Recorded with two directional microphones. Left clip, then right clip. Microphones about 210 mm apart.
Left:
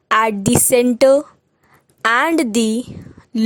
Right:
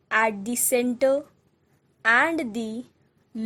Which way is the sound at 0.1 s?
45° left (ahead or behind).